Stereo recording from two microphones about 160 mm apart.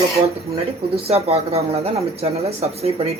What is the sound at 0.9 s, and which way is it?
Speech, 40° right (ahead or behind).